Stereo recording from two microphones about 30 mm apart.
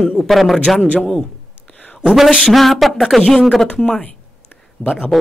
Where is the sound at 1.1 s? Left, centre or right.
Left.